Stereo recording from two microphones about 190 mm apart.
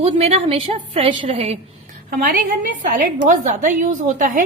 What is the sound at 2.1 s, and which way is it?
A woman's voice, 50° right (ahead or behind).